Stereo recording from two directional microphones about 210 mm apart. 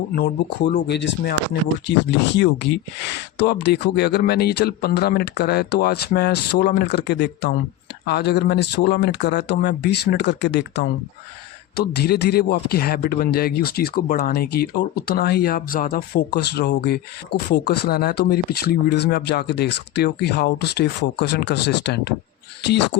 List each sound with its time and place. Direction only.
0.9 s speech: 55° left (ahead or behind)